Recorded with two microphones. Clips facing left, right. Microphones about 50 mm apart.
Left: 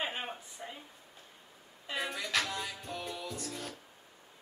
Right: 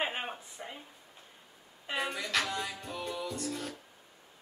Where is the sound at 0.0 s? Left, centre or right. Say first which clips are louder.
Right 3 dB; right.